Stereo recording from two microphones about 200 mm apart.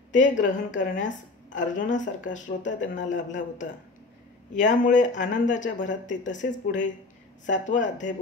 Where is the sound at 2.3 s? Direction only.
40° left (ahead or behind).